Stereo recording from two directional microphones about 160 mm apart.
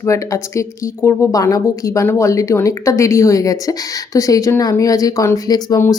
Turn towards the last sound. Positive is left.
turn(degrees=20)  # may be behind; listen again after turning